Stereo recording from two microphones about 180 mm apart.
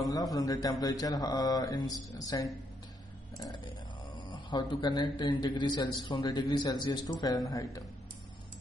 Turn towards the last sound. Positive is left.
turn(degrees=20)  # may be behind; listen again after turning